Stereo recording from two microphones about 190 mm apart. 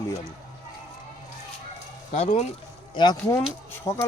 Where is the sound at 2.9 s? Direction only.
25° left (ahead or behind).